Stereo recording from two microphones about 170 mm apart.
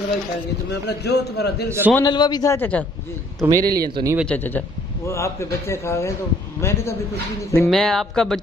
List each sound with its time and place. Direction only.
0.7 s speech: 80° left
1.7 s a man's voice: 10° right (ahead or behind)
2.0 s a man's voice: 25° left (ahead or behind)
3.3 s speech: 20° right (ahead or behind)
4.3 s a man's voice: 10° left (ahead or behind)
7.6 s speech: centre (ahead or behind)